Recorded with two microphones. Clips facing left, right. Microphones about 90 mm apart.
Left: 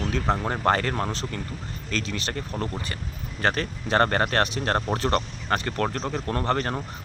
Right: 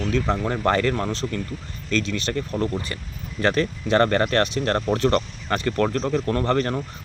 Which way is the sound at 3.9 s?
35° left (ahead or behind).